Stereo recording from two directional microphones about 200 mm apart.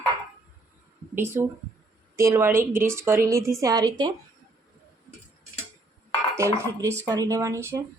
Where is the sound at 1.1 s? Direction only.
10° right (ahead or behind).